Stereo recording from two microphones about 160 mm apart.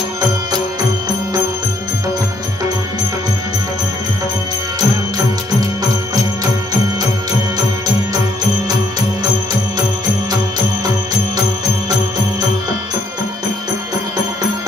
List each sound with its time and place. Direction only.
4.7 s music: 25° right (ahead or behind)